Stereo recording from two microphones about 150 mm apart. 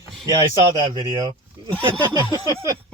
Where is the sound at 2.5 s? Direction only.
20° right (ahead or behind).